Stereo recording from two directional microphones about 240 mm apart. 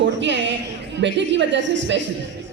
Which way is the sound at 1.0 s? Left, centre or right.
Right.